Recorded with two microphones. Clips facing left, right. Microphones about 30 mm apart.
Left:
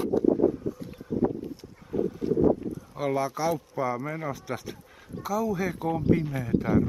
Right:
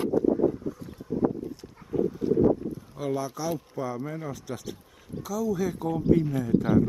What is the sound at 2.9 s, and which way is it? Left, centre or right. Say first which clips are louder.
Speech: left 3 dB; centre.